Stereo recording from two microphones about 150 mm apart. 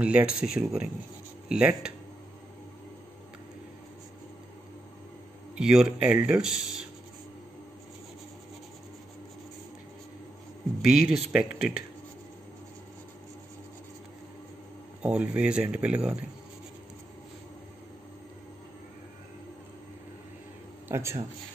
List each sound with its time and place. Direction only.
0.0 s speech: 10° right (ahead or behind)
5.6 s speech: 5° right (ahead or behind)
10.8 s speech: 5° right (ahead or behind)
15.0 s speech: 5° right (ahead or behind)
20.9 s speech: 20° right (ahead or behind)